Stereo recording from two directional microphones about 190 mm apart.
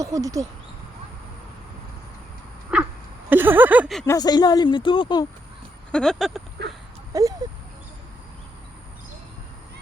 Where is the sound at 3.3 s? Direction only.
10° right (ahead or behind).